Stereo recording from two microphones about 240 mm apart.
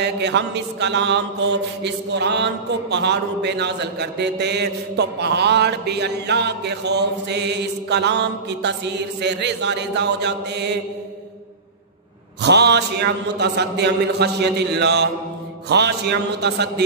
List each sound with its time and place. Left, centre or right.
0.0 s mantra: right
12.4 s mantra: right